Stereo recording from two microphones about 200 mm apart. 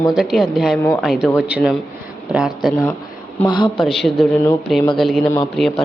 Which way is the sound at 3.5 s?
25° left (ahead or behind).